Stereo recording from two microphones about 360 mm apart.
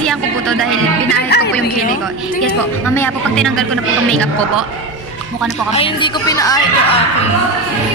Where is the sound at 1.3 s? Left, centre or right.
Left.